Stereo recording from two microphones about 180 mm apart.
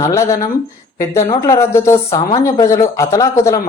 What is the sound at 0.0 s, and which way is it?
Speech, 15° left (ahead or behind).